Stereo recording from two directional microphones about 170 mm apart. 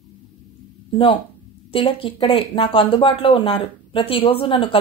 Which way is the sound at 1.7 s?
30° left (ahead or behind).